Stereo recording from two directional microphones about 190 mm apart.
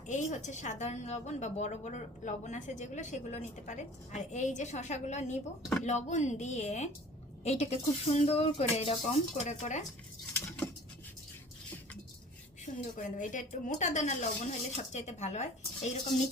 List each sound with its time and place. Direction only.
0.1 s a woman's voice: 40° left (ahead or behind)
12.6 s a woman's voice: 40° left (ahead or behind)